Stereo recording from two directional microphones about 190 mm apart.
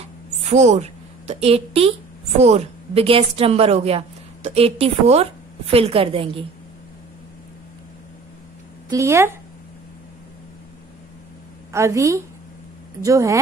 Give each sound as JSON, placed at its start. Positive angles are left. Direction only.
{"t": 0.5, "sound": "speech", "side_deg": -40}
{"t": 8.9, "sound": "speech", "side_deg": -15}
{"t": 11.7, "sound": "speech", "side_deg": -15}